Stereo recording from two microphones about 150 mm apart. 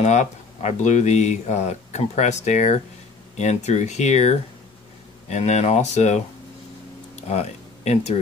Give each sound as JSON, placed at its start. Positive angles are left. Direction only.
{"t": 0.0, "sound": "speech", "side_deg": 50}